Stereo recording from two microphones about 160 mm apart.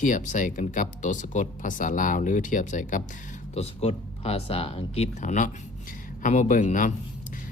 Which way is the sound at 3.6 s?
40° left (ahead or behind).